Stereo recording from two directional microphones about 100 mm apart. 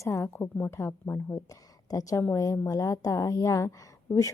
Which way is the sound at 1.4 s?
35° left (ahead or behind).